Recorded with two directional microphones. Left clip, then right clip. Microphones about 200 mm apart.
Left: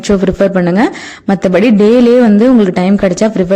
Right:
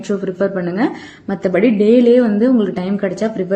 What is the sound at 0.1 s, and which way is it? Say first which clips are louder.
A woman's voice: left 8 dB; 45° left (ahead or behind).